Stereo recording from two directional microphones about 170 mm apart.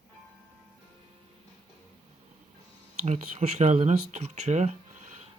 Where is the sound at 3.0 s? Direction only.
40° right (ahead or behind).